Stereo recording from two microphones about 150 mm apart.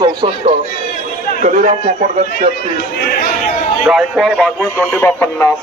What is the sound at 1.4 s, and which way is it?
Speech, 55° right (ahead or behind).